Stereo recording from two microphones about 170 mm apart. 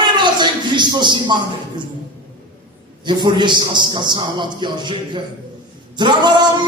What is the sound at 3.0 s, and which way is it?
A man's voice, 25° right (ahead or behind).